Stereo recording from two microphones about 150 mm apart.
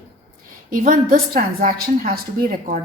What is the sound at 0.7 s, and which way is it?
A woman's voice, 70° right (ahead or behind).